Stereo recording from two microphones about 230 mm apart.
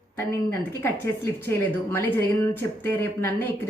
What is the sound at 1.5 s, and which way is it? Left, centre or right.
Speech, centre.